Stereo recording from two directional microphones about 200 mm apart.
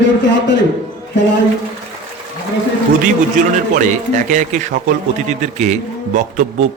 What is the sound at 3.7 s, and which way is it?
Speech, 40° right (ahead or behind).